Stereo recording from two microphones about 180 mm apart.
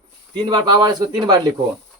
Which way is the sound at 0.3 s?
20° right (ahead or behind).